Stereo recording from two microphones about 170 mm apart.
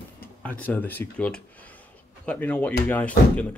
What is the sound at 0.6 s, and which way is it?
Speech, 10° left (ahead or behind).